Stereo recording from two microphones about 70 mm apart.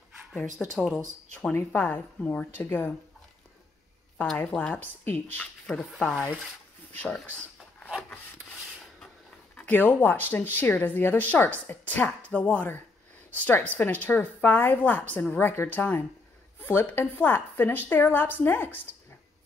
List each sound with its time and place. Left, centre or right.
0.6 s speech: centre
1.5 s a woman's voice: left
4.6 s a woman's voice: left
5.9 s speech: centre
7.0 s a woman's voice: left
9.7 s a woman's voice: left